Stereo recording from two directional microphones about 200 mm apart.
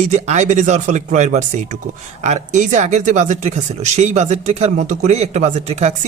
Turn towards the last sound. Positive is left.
turn(degrees=-35)  # may be behind; listen again after turning